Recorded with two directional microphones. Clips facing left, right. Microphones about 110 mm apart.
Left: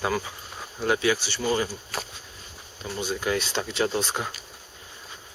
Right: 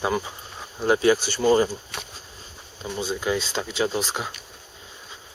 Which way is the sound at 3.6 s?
Centre (ahead or behind).